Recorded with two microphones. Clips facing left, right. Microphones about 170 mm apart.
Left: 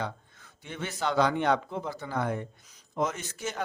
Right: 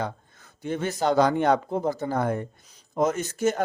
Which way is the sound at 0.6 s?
40° right (ahead or behind).